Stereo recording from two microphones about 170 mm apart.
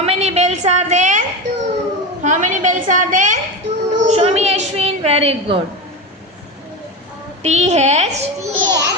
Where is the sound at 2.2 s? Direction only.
45° right (ahead or behind).